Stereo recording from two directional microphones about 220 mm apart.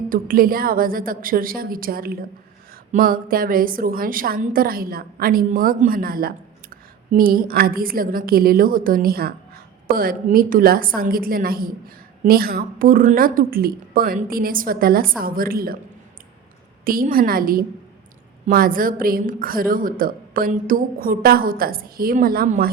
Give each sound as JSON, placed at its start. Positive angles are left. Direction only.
{"t": 0.1, "sound": "a woman's voice", "side_deg": -40}
{"t": 16.8, "sound": "a woman's voice", "side_deg": -40}